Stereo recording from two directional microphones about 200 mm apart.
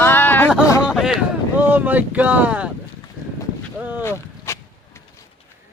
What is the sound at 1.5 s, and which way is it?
Speech, 10° right (ahead or behind).